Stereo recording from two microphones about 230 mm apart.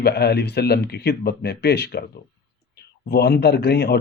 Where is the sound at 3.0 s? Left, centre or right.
Left.